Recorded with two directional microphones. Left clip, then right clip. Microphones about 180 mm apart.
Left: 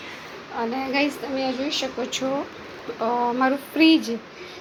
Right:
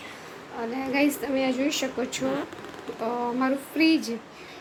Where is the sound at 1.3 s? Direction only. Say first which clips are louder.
Even; 35° right (ahead or behind).